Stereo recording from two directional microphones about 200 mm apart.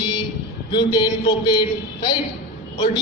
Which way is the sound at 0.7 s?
20° left (ahead or behind).